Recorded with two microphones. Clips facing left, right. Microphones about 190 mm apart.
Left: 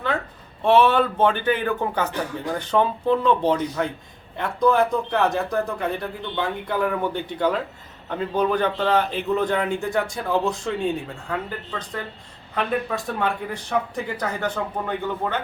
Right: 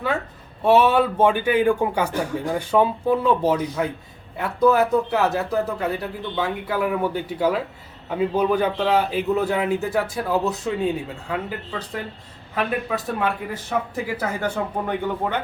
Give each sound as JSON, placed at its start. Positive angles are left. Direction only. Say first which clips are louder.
{"t": 0.6, "sound": "a man's voice", "louder": "right 1 dB", "side_deg": -10}